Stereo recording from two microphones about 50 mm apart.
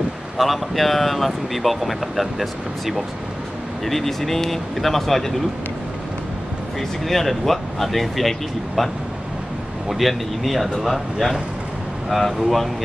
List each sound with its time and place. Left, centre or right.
0.4 s speech: centre
3.8 s speech: centre
7.1 s speech: centre